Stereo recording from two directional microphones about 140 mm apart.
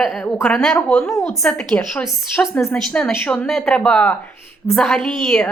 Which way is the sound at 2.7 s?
5° left (ahead or behind).